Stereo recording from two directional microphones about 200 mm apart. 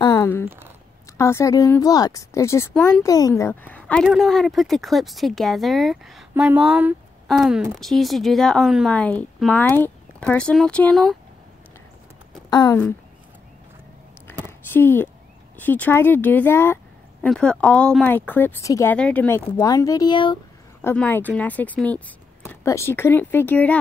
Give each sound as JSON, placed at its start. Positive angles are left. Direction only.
{"t": 0.0, "sound": "a sound", "side_deg": 15}
{"t": 1.1, "sound": "a woman's voice", "side_deg": 15}
{"t": 12.4, "sound": "speech", "side_deg": 20}
{"t": 14.7, "sound": "speech", "side_deg": 10}
{"t": 20.8, "sound": "speech", "side_deg": 10}